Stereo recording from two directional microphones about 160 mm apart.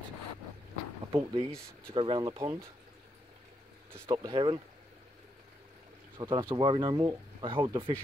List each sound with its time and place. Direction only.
1.1 s speech: 35° right (ahead or behind)
4.1 s speech: 35° right (ahead or behind)
6.1 s speech: 30° right (ahead or behind)